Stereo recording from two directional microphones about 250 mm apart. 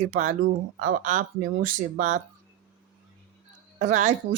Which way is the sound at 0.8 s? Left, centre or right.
Right.